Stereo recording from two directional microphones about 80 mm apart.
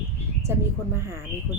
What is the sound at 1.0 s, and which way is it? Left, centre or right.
Speech, right.